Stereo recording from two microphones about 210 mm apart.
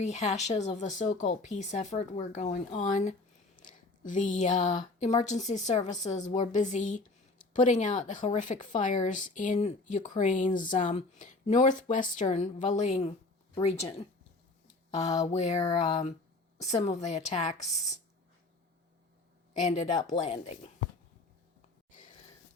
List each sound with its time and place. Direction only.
0.0 s speech: 35° left (ahead or behind)
14.9 s speech: 30° left (ahead or behind)
19.6 s speech: 35° left (ahead or behind)